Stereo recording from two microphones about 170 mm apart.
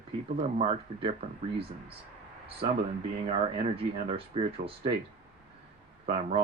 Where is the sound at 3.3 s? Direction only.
35° right (ahead or behind).